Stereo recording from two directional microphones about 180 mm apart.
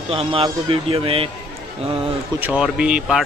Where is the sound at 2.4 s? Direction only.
5° right (ahead or behind).